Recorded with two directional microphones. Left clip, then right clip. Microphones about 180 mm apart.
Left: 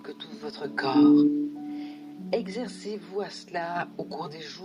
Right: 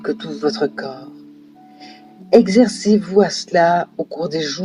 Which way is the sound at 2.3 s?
35° left (ahead or behind).